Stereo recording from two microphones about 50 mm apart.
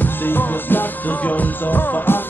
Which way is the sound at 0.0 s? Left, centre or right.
Left.